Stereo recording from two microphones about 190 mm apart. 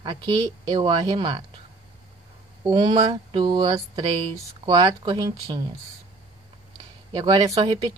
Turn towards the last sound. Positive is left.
turn(degrees=-30)  # may be behind; listen again after turning